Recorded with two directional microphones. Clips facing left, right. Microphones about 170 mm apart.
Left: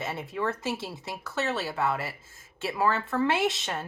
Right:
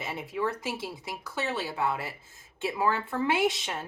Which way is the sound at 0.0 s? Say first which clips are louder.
Even; 10° right (ahead or behind).